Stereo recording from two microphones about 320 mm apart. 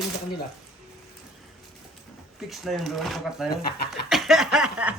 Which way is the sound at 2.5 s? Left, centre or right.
Centre.